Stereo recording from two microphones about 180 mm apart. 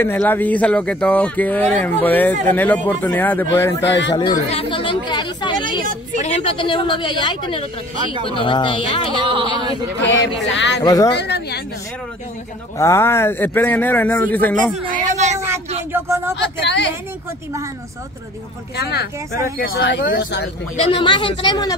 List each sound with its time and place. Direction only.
0.0 s speech: 10° left (ahead or behind)
3.8 s speech: 90° left
4.5 s speech: 30° left (ahead or behind)
6.1 s speech: 35° left (ahead or behind)
9.2 s speech: 30° right (ahead or behind)
10.0 s speech: 85° left
10.8 s speech: 20° left (ahead or behind)
11.1 s speech: 70° left (ahead or behind)
12.7 s speech: 15° left (ahead or behind)
14.9 s speech: 45° right (ahead or behind)
15.9 s speech: 15° right (ahead or behind)
16.3 s speech: 80° left
18.8 s speech: 65° left (ahead or behind)
20.7 s speech: 35° left (ahead or behind)